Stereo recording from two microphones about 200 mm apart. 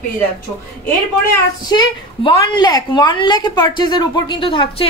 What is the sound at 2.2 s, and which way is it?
A woman's voice, 20° left (ahead or behind).